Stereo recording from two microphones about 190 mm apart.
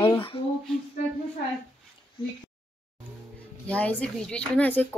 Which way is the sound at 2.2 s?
25° left (ahead or behind).